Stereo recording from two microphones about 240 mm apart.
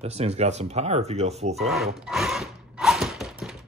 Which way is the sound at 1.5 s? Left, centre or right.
Centre.